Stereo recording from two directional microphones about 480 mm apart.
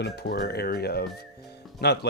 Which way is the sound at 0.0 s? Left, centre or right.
Centre.